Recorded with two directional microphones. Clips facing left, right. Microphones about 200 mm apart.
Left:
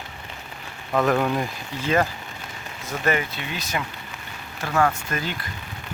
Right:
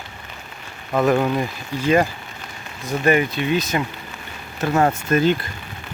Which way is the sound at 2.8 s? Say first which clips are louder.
Right 6 dB; 15° right (ahead or behind).